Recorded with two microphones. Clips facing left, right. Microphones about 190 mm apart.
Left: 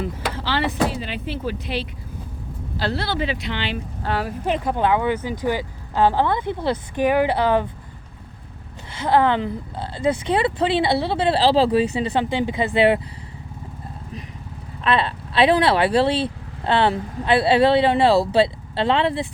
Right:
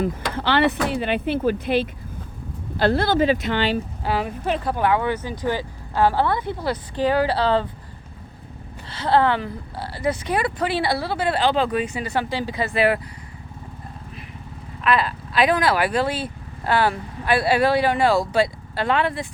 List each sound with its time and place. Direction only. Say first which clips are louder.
0.0 s speech: right 3 dB; 60° right (ahead or behind)
4.0 s speech: left 2 dB; centre (ahead or behind)
4.4 s speech: left 2 dB; 15° left (ahead or behind)
8.9 s speech: left 1 dB; 15° left (ahead or behind)
14.8 s speech: even; 30° left (ahead or behind)